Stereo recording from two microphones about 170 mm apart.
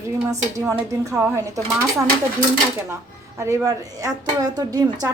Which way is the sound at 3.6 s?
20° right (ahead or behind).